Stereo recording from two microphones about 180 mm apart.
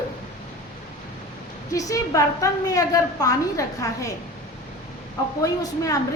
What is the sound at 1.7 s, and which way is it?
A woman's voice, 20° left (ahead or behind).